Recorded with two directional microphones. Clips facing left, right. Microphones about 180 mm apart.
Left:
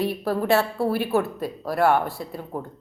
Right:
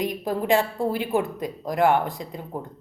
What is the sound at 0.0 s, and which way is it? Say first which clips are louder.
A woman's voice: left 2 dB; 15° right (ahead or behind).